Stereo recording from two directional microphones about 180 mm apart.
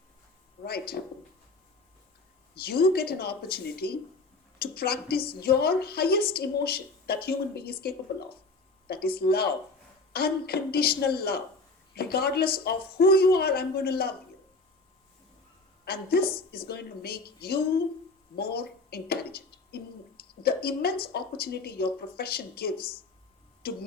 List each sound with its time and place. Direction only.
0.6 s a sound: 60° left (ahead or behind)
2.6 s speech: 60° left (ahead or behind)
15.8 s speech: 60° left (ahead or behind)